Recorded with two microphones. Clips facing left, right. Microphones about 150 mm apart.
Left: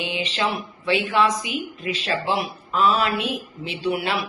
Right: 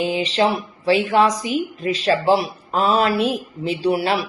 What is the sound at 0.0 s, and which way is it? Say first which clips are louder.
Speech: right 7 dB; 40° right (ahead or behind).